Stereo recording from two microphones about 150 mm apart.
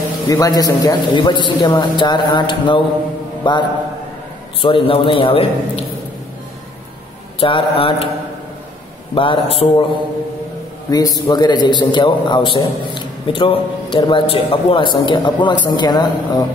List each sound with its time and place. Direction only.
0.3 s a man's voice: 25° left (ahead or behind); by 5.9 s 40° left (ahead or behind)
7.3 s a man's voice: 35° left (ahead or behind)
9.1 s a man's voice: 35° left (ahead or behind)
10.9 s a man's voice: 25° left (ahead or behind)